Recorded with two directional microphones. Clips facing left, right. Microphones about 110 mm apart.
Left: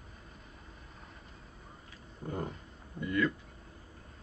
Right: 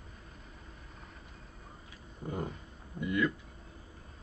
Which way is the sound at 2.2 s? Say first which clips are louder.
Even; 5° right (ahead or behind).